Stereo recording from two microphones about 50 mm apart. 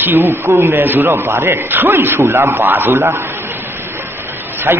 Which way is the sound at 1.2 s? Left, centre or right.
Right.